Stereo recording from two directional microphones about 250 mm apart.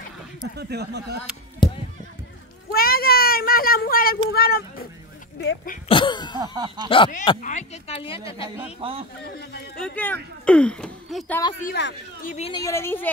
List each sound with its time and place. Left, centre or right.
0.6 s speech: right
1.6 s basketball bounce: centre
2.7 s a child's voice: left
5.9 s a woman's voice: centre
6.3 s speech: centre
7.4 s speech: left
8.8 s a man's voice: right
9.2 s speech: left
9.8 s speech: centre
11.6 s speech: left
12.4 s speech: left
12.6 s a woman's voice: centre